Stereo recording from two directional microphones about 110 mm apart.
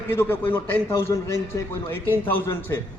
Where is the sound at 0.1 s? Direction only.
20° left (ahead or behind).